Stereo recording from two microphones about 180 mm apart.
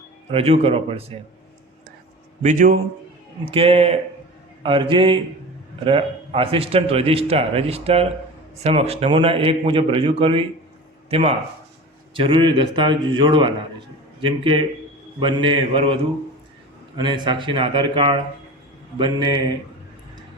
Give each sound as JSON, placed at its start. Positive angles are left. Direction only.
{"t": 0.3, "sound": "a man's voice", "side_deg": -30}
{"t": 2.4, "sound": "a man's voice", "side_deg": -45}
{"t": 3.4, "sound": "a man's voice", "side_deg": -30}
{"t": 17.0, "sound": "a man's voice", "side_deg": -25}